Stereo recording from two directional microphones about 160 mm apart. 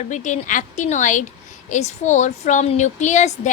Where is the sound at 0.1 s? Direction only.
50° left (ahead or behind).